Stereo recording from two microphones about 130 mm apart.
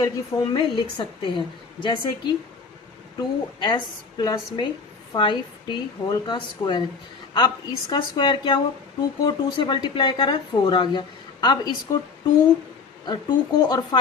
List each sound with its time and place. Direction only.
0.0 s speech: 30° left (ahead or behind)
0.8 s a woman's voice: 40° left (ahead or behind)
13.1 s a woman's voice: 35° left (ahead or behind)